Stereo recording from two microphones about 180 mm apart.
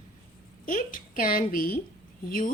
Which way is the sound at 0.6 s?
50° left (ahead or behind).